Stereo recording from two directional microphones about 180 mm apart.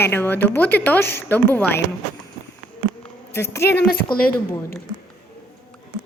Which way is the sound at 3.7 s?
60° left (ahead or behind).